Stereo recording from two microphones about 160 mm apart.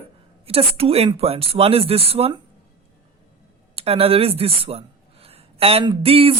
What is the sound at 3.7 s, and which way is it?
Speech, 35° right (ahead or behind).